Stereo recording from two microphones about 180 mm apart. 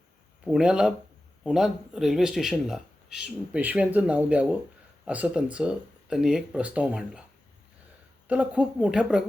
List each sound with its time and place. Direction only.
0.4 s speech: 5° right (ahead or behind)
8.3 s speech: 5° right (ahead or behind)